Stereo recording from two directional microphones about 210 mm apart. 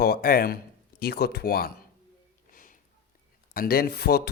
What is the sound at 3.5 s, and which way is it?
Speech, 45° left (ahead or behind).